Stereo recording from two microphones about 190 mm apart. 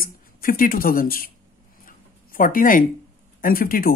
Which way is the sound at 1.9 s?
45° left (ahead or behind).